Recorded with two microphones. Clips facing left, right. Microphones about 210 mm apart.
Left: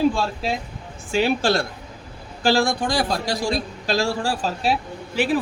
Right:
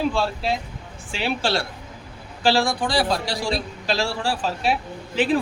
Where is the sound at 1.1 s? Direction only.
45° left (ahead or behind).